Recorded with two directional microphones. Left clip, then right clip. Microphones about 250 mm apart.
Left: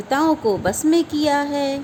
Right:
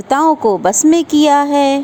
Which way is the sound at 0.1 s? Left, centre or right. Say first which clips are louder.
Right 7 dB; right.